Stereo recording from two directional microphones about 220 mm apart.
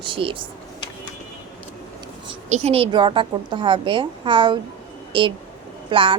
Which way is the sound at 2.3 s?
30° right (ahead or behind).